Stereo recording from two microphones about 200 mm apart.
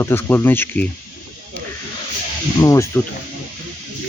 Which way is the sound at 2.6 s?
15° left (ahead or behind).